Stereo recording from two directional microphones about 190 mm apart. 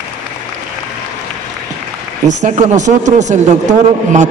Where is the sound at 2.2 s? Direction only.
40° right (ahead or behind).